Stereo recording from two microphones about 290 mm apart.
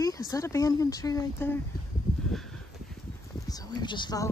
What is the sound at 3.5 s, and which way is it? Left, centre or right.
Speech, centre.